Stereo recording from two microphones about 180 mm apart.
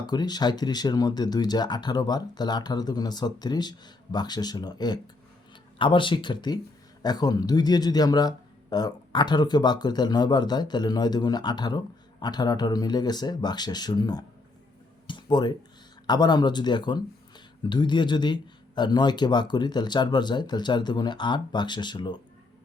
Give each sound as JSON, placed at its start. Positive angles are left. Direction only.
{"t": 0.0, "sound": "speech", "side_deg": 20}
{"t": 15.0, "sound": "a sound", "side_deg": 25}
{"t": 16.0, "sound": "speech", "side_deg": 25}